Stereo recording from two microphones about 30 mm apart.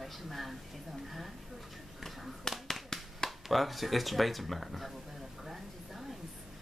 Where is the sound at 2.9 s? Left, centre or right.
Centre.